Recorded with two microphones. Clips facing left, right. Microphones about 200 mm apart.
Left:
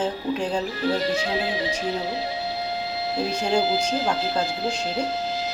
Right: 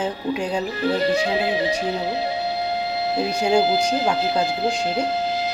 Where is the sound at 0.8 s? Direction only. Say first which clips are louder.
Right 5 dB; 60° right (ahead or behind).